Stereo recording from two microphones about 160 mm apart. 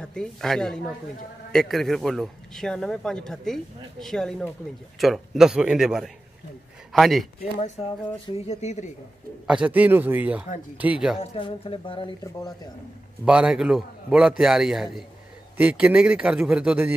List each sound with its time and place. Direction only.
0.0 s a man's voice: 5° left (ahead or behind)
8.4 s speech: 40° left (ahead or behind)
9.5 s a man's voice: 10° right (ahead or behind)
11.1 s speech: 35° left (ahead or behind)
12.2 s speech: 25° left (ahead or behind)
13.2 s a man's voice: 5° right (ahead or behind)